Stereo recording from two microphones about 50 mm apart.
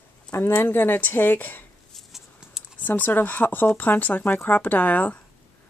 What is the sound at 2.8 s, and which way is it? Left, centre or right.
Speech, left.